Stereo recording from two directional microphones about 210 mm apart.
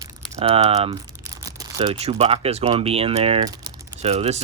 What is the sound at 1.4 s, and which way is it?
Speech, 20° right (ahead or behind).